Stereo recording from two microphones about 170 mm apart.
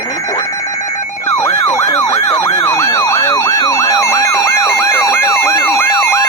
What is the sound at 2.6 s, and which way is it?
Emergency vehicle, 20° left (ahead or behind).